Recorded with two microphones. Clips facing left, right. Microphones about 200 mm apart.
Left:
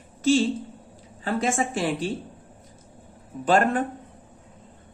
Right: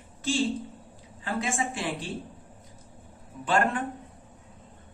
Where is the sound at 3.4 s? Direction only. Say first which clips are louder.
Left 5 dB; 40° left (ahead or behind).